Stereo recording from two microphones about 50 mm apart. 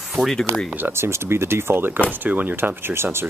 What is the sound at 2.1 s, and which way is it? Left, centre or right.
Speech, right.